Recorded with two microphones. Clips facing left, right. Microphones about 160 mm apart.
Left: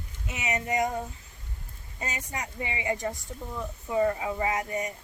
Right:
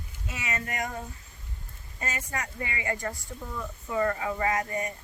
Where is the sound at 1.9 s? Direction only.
20° left (ahead or behind).